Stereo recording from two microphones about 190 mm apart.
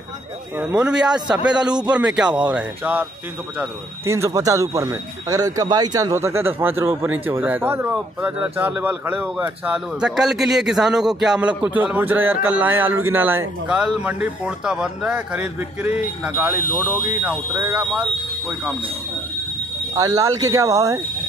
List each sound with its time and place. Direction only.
0.6 s a man's voice: 5° right (ahead or behind)
1.5 s a man's voice: 20° right (ahead or behind)
1.8 s a man's voice: 5° right (ahead or behind)
20.0 s speech: 15° right (ahead or behind)